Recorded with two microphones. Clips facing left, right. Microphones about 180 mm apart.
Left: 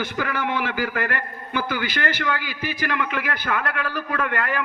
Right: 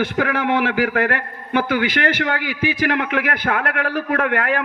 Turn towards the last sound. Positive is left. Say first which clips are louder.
# right 5 dB
turn(degrees=-65)  # may be behind; listen again after turning